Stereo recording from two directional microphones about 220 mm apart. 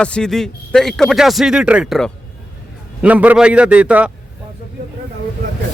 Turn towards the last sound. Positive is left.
turn(degrees=-5)  # may be behind; listen again after turning